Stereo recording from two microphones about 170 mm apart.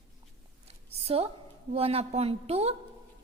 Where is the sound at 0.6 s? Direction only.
35° right (ahead or behind).